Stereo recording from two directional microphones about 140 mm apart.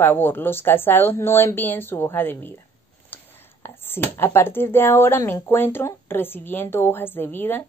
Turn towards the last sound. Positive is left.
turn(degrees=15)  # may be behind; listen again after turning